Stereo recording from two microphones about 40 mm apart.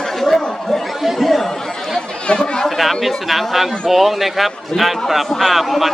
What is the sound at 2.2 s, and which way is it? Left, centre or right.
Chatter, left.